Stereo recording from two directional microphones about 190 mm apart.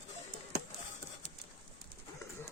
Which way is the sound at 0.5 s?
55° right (ahead or behind).